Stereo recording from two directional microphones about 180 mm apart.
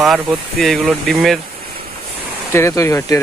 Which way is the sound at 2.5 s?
15° left (ahead or behind).